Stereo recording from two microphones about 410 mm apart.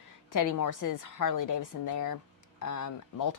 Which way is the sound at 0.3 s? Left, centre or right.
Left.